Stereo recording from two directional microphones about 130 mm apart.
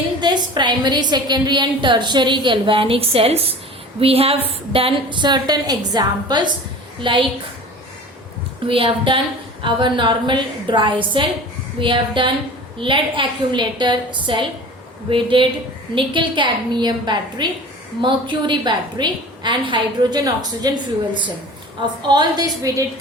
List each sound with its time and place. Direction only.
0.2 s a woman's voice: 35° right (ahead or behind)
8.6 s a woman's voice: 45° right (ahead or behind)